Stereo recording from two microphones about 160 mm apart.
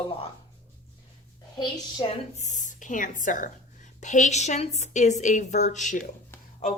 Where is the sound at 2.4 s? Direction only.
50° left (ahead or behind).